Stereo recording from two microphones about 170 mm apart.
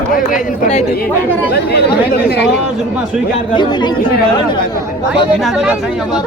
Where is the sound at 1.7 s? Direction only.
75° left (ahead or behind).